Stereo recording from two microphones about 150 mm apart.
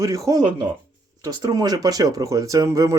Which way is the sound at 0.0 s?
20° right (ahead or behind).